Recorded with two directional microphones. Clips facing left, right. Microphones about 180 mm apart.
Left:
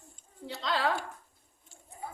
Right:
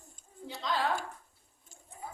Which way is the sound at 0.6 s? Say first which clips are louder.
Left 1 dB; 90° left.